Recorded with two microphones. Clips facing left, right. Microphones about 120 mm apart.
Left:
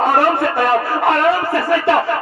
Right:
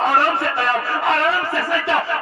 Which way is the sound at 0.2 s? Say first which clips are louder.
Left 5 dB; 55° left (ahead or behind).